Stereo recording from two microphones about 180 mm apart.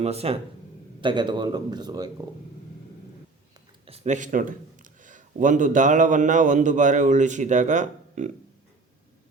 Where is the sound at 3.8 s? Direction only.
35° right (ahead or behind).